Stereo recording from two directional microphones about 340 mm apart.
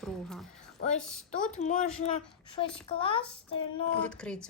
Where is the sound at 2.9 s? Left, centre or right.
Centre.